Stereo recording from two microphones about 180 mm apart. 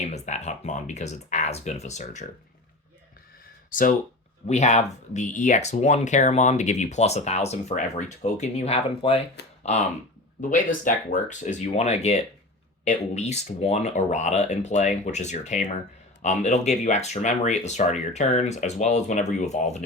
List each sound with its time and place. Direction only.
0.0 s speech: 40° left (ahead or behind)
3.7 s speech: 50° left (ahead or behind)